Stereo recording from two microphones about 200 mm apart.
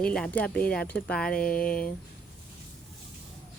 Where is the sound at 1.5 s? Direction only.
45° left (ahead or behind).